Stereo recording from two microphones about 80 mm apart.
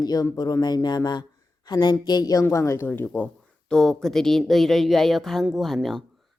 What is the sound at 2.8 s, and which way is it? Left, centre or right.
Speech, left.